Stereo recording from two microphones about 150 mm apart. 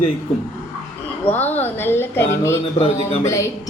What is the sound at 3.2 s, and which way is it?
Speech, 20° left (ahead or behind).